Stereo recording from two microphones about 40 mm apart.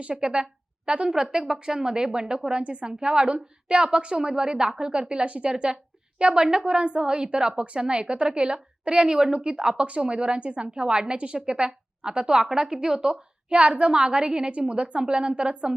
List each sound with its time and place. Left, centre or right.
0.0 s a woman's voice: right
1.1 s a woman's voice: centre
13.5 s a woman's voice: right